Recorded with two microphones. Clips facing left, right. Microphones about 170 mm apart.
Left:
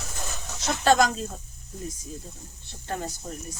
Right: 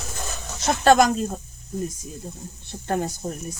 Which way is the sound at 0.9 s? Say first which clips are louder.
Right 4 dB; 50° right (ahead or behind).